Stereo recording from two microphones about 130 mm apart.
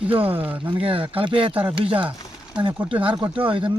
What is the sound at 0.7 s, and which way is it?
Speech, 45° right (ahead or behind).